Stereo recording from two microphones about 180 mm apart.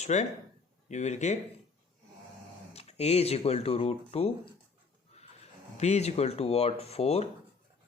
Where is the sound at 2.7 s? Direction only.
35° left (ahead or behind).